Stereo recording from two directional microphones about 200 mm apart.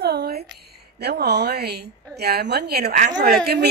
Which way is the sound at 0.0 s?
55° right (ahead or behind).